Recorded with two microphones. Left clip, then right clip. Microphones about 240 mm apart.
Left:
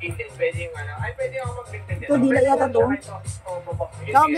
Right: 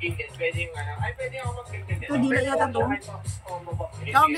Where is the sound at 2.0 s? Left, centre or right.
Centre.